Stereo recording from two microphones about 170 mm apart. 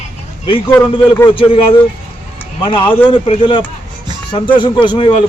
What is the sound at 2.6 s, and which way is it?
Speech, 30° left (ahead or behind).